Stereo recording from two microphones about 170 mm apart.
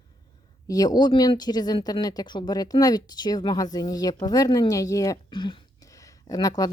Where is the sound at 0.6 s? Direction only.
20° left (ahead or behind).